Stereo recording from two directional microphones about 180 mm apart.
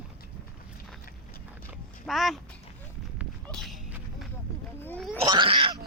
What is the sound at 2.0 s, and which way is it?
Speech, centre (ahead or behind).